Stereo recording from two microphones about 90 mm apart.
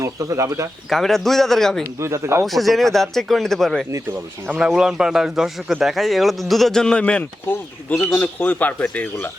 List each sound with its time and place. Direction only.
0.0 s speech: 35° right (ahead or behind)
0.9 s speech: 5° left (ahead or behind)
2.0 s speech: 30° right (ahead or behind)
2.4 s speech: centre (ahead or behind)
4.4 s speech: 15° right (ahead or behind); by 7.3 s 10° left (ahead or behind)
7.4 s speech: 25° left (ahead or behind)